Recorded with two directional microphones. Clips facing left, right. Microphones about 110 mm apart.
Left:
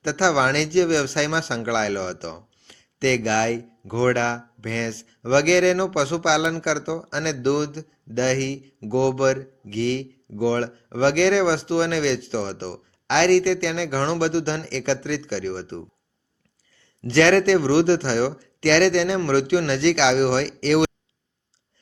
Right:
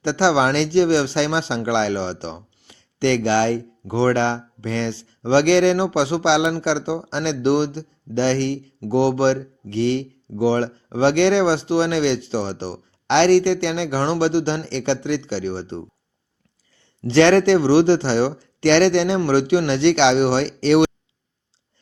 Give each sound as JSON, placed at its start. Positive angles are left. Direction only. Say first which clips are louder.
{"t": 0.0, "sound": "speech", "louder": "right 3 dB", "side_deg": -20}
{"t": 17.0, "sound": "speech", "louder": "right 3 dB", "side_deg": -20}